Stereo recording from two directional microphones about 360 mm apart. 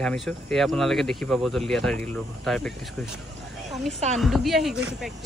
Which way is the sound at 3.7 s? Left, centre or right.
Centre.